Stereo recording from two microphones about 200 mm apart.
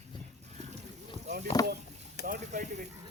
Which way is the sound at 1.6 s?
20° left (ahead or behind).